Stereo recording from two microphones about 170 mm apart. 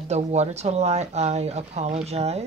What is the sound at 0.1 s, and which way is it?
Speech, 40° right (ahead or behind).